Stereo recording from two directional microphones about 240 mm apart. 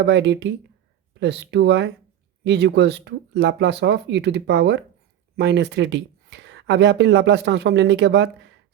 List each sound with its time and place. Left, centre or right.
0.0 s speech: right